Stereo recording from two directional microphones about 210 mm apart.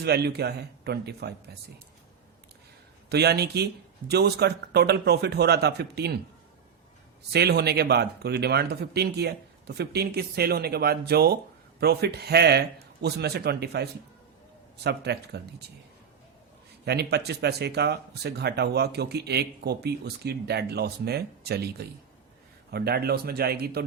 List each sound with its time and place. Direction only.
0.0 s speech: 50° right (ahead or behind)
3.1 s speech: 50° right (ahead or behind)
7.3 s speech: 50° right (ahead or behind)
14.8 s speech: 50° right (ahead or behind)
16.8 s speech: 50° right (ahead or behind)